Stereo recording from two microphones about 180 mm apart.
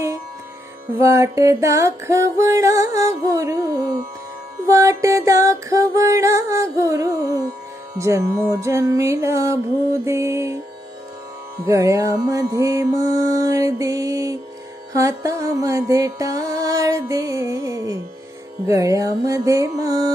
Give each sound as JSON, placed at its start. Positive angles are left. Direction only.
{"t": 0.9, "sound": "music", "side_deg": -15}
{"t": 11.6, "sound": "music", "side_deg": -15}